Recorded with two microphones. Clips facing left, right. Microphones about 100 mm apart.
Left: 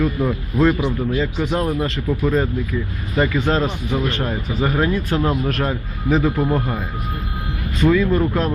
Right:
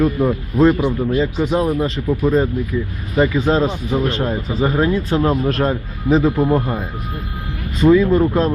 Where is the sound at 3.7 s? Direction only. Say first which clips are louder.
Right 3 dB; 30° right (ahead or behind).